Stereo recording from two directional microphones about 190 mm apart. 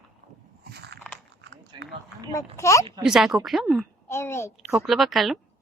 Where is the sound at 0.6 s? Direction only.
60° right (ahead or behind).